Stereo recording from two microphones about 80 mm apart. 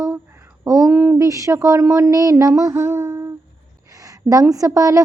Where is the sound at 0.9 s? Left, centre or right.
Right.